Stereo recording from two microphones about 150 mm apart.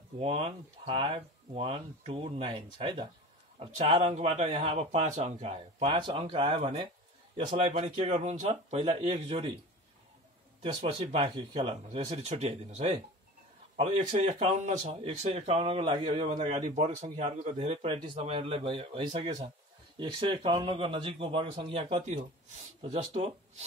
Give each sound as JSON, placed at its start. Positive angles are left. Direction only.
{"t": 0.2, "sound": "a man's voice", "side_deg": -45}
{"t": 10.6, "sound": "a man's voice", "side_deg": -35}
{"t": 16.1, "sound": "a man's voice", "side_deg": -45}
{"t": 16.3, "sound": "a man's voice", "side_deg": -35}